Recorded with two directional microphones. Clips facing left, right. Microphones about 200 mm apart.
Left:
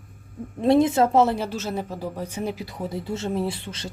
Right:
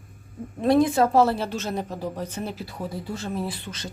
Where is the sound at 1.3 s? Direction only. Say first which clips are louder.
Even; 5° left (ahead or behind).